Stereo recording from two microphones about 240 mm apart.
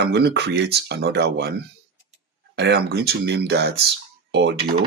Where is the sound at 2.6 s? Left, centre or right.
Right.